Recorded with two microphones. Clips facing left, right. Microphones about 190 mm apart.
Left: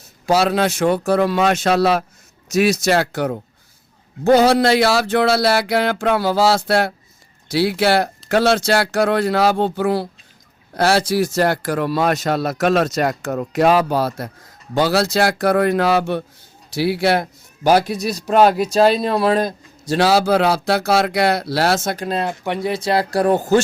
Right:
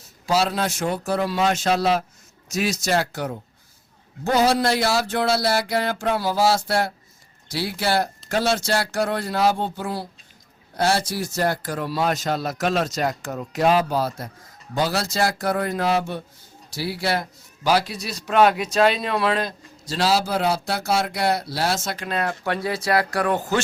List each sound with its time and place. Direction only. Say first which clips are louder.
0.3 s a sound: left 5 dB; 65° left (ahead or behind)
10.8 s a man's voice: left 6 dB; 80° left; by 13.5 s 60° left (ahead or behind)
13.6 s a sound: left 4 dB; 70° left (ahead or behind)
16.7 s a man's voice: left 8 dB; 65° left (ahead or behind)
21.8 s speech: left 7 dB; 45° left (ahead or behind)
22.1 s speech: even; 25° left (ahead or behind)